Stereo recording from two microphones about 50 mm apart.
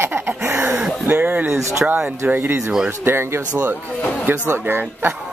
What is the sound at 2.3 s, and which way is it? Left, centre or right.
Speech, right.